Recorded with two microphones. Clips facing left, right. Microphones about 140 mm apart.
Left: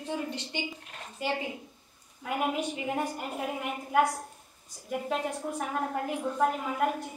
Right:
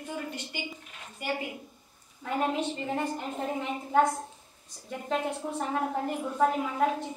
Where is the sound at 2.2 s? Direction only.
5° left (ahead or behind).